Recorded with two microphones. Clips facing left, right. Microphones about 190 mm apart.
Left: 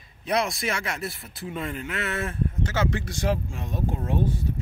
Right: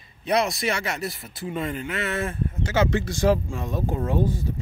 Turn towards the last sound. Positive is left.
turn(degrees=-40)  # may be behind; listen again after turning